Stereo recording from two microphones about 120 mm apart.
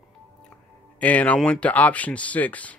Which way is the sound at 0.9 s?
10° left (ahead or behind).